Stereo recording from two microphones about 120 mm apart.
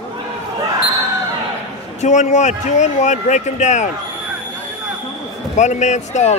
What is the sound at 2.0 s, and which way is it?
Speech, 80° left.